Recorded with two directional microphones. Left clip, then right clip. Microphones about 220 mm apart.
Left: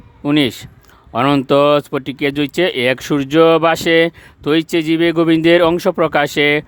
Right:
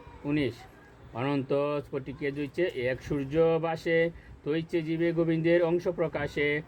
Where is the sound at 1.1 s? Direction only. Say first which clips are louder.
Left 16 dB; 55° left (ahead or behind).